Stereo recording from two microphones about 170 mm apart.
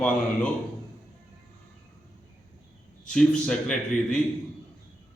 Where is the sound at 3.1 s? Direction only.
5° left (ahead or behind).